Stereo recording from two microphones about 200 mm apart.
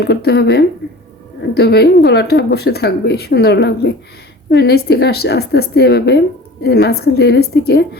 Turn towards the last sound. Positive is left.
turn(degrees=55)  # may be behind; listen again after turning